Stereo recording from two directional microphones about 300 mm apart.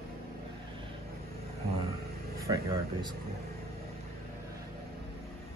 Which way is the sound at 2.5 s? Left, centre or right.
Centre.